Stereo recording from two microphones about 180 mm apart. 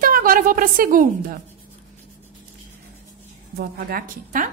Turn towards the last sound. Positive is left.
turn(degrees=-50)  # may be behind; listen again after turning